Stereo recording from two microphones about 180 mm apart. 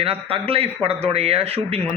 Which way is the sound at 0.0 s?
30° right (ahead or behind).